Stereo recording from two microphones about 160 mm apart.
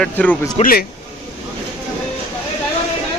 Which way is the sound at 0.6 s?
65° left (ahead or behind).